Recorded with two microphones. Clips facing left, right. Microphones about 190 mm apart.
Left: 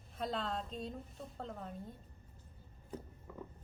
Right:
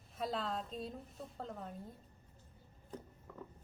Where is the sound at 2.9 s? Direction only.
10° left (ahead or behind).